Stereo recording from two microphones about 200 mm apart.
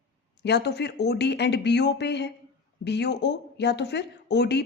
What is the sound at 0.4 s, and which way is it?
Speech, 55° left (ahead or behind).